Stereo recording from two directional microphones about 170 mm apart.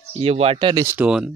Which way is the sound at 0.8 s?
10° right (ahead or behind).